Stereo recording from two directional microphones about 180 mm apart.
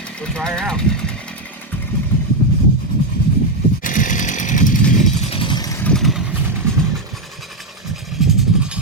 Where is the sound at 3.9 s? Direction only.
45° left (ahead or behind).